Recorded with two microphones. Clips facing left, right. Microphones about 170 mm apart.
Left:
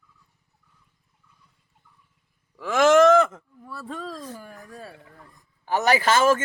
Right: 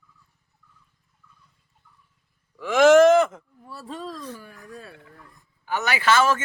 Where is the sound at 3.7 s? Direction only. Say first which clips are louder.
Even; 55° left (ahead or behind).